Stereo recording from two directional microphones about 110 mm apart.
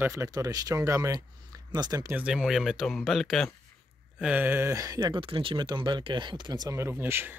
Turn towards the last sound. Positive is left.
turn(degrees=-20)  # may be behind; listen again after turning